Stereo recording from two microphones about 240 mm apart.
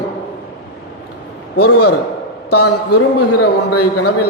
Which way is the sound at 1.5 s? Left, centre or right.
Left.